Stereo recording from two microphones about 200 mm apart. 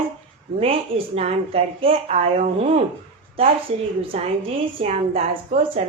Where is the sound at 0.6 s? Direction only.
30° right (ahead or behind).